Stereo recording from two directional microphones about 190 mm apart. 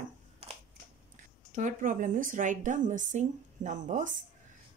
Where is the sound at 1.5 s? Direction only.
40° right (ahead or behind).